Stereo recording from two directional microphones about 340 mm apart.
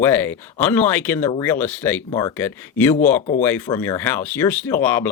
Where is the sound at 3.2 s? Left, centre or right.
Left.